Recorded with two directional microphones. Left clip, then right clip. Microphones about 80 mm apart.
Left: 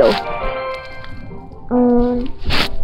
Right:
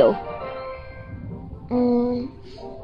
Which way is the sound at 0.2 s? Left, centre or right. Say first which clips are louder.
Left 9 dB; left.